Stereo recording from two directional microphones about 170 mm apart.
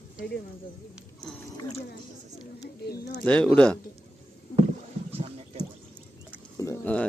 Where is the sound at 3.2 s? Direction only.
5° left (ahead or behind).